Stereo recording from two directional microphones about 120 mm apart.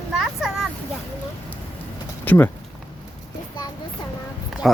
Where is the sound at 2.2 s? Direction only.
15° left (ahead or behind).